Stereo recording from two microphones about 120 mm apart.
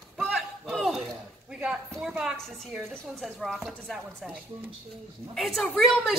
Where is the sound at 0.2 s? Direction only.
Centre (ahead or behind).